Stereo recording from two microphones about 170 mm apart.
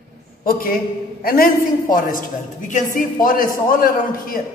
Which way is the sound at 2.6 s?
50° left (ahead or behind).